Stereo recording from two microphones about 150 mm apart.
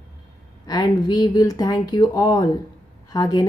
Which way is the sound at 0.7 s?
25° left (ahead or behind).